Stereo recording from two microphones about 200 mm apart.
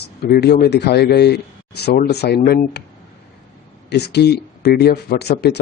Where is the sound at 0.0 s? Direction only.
55° left (ahead or behind).